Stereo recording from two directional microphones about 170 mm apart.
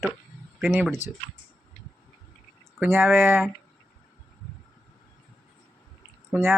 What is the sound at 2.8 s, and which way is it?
Speech, 15° right (ahead or behind).